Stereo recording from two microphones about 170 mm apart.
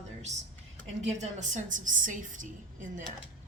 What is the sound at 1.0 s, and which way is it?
A woman's voice, 45° right (ahead or behind).